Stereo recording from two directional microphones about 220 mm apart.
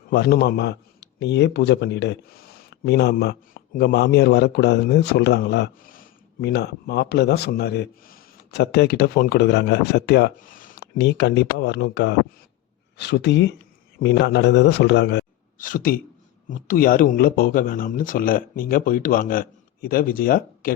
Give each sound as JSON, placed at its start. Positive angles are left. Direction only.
{"t": 0.1, "sound": "speech", "side_deg": 50}
{"t": 10.9, "sound": "a man's voice", "side_deg": 50}